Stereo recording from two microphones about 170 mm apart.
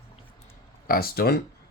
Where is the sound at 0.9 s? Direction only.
60° left (ahead or behind).